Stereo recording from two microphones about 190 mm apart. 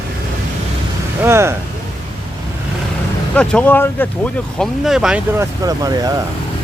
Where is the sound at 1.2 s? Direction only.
15° right (ahead or behind).